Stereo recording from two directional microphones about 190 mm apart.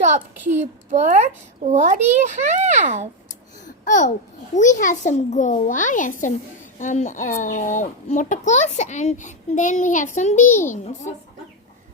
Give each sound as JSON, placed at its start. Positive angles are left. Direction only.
{"t": 0.6, "sound": "a child's voice", "side_deg": -40}
{"t": 3.8, "sound": "a child's voice", "side_deg": 40}